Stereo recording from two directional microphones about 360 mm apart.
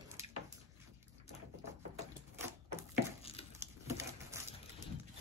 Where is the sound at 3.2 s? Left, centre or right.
Centre.